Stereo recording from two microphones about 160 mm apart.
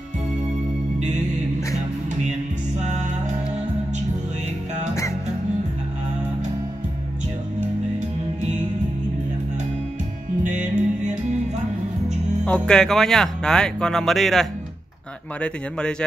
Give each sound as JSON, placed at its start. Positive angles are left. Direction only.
{"t": 10.4, "sound": "music", "side_deg": -50}
{"t": 12.4, "sound": "speech", "side_deg": 5}